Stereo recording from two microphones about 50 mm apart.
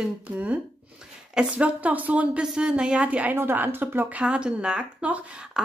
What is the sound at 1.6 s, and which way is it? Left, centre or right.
Speech, right.